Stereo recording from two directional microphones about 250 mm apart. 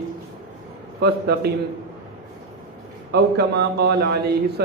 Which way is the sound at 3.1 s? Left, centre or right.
Right.